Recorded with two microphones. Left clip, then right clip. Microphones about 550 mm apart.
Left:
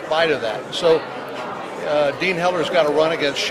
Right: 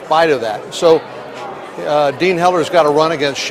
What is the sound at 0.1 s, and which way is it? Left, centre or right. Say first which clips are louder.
Speech: right 6 dB; right.